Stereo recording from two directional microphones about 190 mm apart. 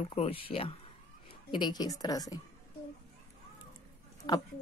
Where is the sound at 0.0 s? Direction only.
30° left (ahead or behind).